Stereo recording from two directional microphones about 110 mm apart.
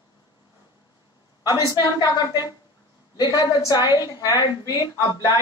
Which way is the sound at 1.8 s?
35° left (ahead or behind).